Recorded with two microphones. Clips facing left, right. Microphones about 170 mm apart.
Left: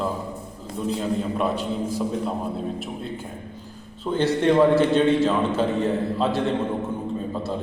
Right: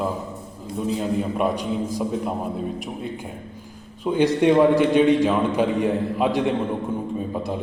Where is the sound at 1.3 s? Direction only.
15° right (ahead or behind).